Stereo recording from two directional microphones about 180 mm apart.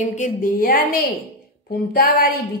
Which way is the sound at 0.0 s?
45° left (ahead or behind).